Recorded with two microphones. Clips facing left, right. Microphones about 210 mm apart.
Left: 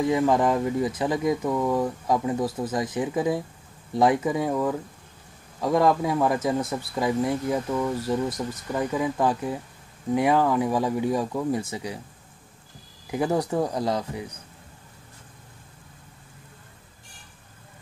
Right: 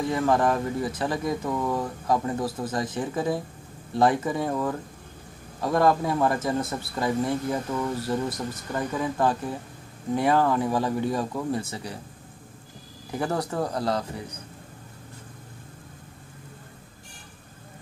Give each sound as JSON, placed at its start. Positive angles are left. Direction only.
{"t": 0.1, "sound": "speech", "side_deg": 15}
{"t": 13.1, "sound": "speech", "side_deg": 15}